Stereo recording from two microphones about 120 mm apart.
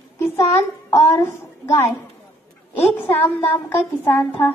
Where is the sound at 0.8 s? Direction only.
25° left (ahead or behind).